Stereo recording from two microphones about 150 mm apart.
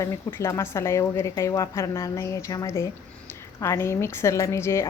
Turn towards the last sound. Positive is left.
turn(degrees=20)  # may be behind; listen again after turning